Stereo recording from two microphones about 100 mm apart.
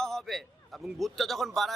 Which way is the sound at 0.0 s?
5° left (ahead or behind).